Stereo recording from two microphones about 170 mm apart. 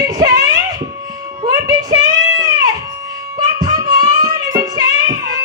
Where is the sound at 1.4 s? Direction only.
20° right (ahead or behind).